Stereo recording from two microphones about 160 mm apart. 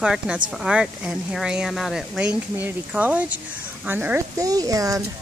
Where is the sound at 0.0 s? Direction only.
5° right (ahead or behind); by 5.0 s 20° right (ahead or behind).